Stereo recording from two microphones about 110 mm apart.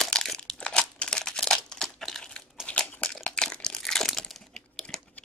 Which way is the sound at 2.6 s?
10° left (ahead or behind).